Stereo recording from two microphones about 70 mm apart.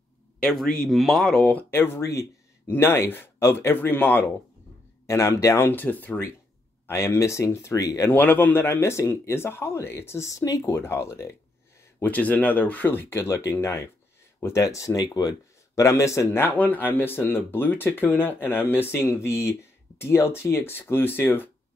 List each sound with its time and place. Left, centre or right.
0.4 s speech: centre
1.4 s speech: left
1.7 s speech: left
5.0 s speech: left
5.7 s speech: left
6.9 s speech: left
7.8 s speech: left
8.1 s speech: left
10.6 s speech: left
12.0 s speech: left